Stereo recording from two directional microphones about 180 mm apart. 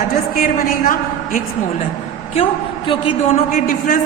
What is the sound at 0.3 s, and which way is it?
A woman's voice, 50° left (ahead or behind).